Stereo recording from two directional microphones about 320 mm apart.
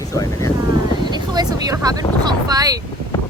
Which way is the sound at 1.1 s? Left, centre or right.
Centre.